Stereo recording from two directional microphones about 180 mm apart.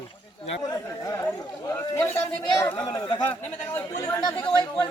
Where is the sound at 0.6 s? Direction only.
20° left (ahead or behind).